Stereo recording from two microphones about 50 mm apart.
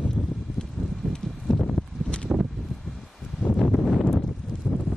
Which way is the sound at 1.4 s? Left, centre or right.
Centre.